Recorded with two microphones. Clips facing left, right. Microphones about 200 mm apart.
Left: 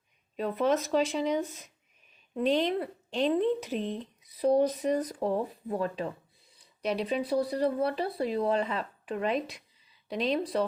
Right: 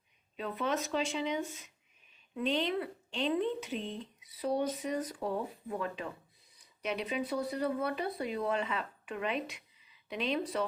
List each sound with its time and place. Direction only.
0.3 s speech: 40° left (ahead or behind)